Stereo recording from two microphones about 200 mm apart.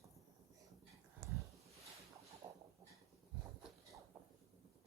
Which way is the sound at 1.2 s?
15° right (ahead or behind).